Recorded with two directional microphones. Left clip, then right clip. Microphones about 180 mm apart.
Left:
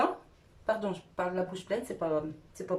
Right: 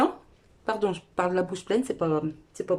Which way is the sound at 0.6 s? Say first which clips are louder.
Right 4 dB; 55° right (ahead or behind).